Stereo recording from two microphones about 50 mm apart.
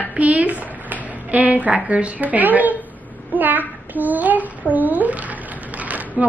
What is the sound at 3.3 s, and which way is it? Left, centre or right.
Child singing, right.